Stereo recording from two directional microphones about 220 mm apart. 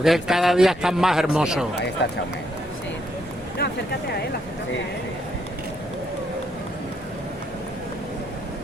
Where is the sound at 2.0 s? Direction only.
50° left (ahead or behind).